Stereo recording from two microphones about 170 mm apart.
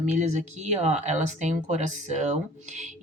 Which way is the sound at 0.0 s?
45° right (ahead or behind).